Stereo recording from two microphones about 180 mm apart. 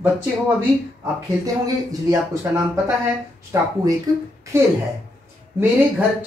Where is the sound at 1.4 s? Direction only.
20° right (ahead or behind).